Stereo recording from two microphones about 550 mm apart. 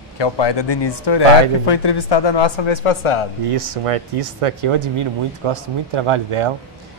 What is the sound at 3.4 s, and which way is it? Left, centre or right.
Speech, right.